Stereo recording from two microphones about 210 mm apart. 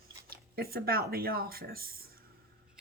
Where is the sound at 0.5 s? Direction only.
45° right (ahead or behind).